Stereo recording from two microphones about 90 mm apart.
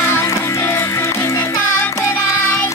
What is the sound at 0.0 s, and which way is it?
Music, 30° left (ahead or behind).